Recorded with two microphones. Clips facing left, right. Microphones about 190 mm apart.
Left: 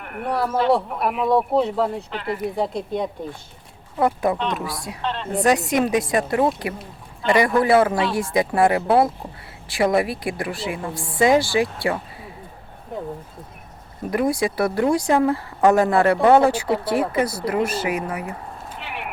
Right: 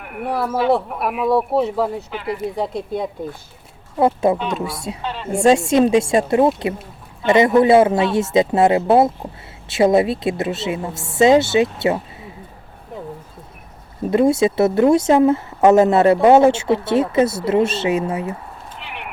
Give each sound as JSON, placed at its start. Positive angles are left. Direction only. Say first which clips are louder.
{"t": 0.0, "sound": "speech", "louder": "right 1 dB", "side_deg": -5}
{"t": 4.0, "sound": "a woman's voice", "louder": "right 4 dB", "side_deg": -25}
{"t": 5.0, "sound": "a woman's voice", "louder": "left 3 dB", "side_deg": -5}
{"t": 5.3, "sound": "a woman's voice", "louder": "right 5 dB", "side_deg": -25}
{"t": 14.1, "sound": "a woman's voice", "louder": "right 6 dB", "side_deg": -25}
{"t": 18.8, "sound": "vehicle", "louder": "left 1 dB", "side_deg": 0}